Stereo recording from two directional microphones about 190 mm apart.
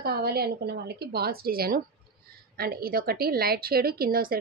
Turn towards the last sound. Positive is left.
turn(degrees=-50)  # may be behind; listen again after turning